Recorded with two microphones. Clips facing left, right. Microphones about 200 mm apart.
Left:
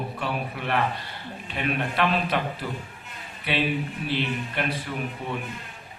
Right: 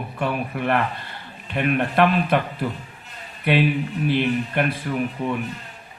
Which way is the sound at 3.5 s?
55° right (ahead or behind).